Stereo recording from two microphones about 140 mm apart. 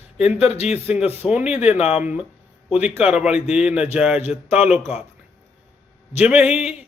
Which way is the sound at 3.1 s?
5° right (ahead or behind).